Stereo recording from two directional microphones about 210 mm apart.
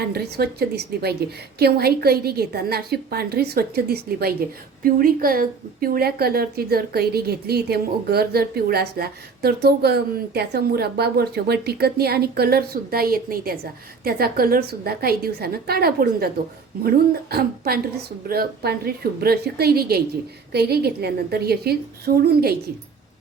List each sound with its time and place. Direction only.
0.0 s a woman's voice: 50° right (ahead or behind)
17.3 s a woman's voice: 50° right (ahead or behind)